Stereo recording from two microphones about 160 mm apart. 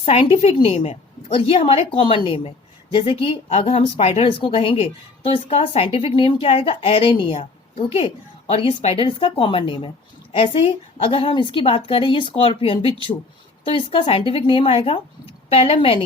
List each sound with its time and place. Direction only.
0.0 s speech: 35° left (ahead or behind)